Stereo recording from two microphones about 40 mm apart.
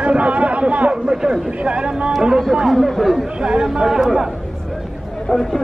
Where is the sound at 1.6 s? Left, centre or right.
Right.